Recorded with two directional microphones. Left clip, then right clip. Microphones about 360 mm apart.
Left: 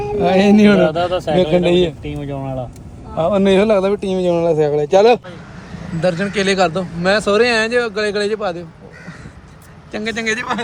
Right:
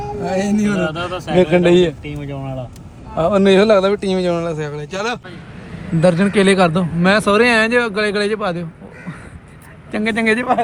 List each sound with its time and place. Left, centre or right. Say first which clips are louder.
0.2 s a man's voice: left 8 dB; centre
1.4 s a man's voice: right 3 dB; centre
2.0 s a man's voice: left 3 dB; centre
2.4 s a man's voice: left 3 dB; centre
4.4 s a man's voice: left 8 dB; centre
6.0 s a man's voice: right 3 dB; centre
9.9 s a man's voice: right 3 dB; centre